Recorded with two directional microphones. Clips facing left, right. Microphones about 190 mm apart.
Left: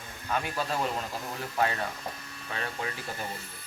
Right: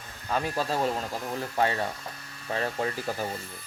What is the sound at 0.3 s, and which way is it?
Speech, 35° right (ahead or behind).